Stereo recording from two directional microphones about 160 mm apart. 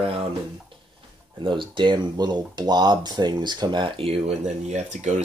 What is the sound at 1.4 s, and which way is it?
Speech, 30° right (ahead or behind).